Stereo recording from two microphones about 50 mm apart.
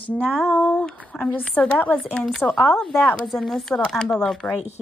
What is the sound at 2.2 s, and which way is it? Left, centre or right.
Speech, centre.